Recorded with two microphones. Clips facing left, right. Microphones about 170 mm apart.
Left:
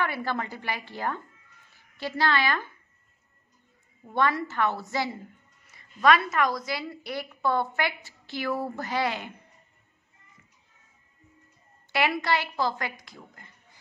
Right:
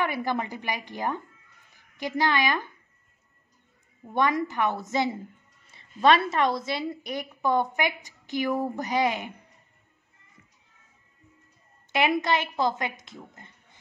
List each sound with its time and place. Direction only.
0.0 s a woman's voice: 15° right (ahead or behind)
4.1 s a woman's voice: 15° right (ahead or behind)
11.9 s a woman's voice: 20° right (ahead or behind)